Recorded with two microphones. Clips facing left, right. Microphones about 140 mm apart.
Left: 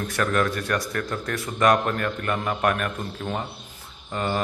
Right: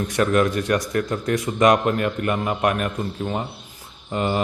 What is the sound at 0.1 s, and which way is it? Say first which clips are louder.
Speech: right 5 dB; 15° right (ahead or behind).